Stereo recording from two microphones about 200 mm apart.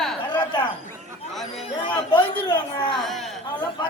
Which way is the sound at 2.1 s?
20° left (ahead or behind).